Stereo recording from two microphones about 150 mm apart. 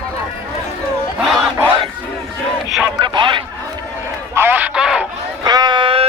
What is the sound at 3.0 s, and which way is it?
Radio, 30° right (ahead or behind).